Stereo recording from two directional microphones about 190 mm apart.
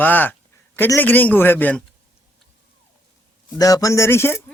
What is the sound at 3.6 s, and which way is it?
Speech, 20° left (ahead or behind).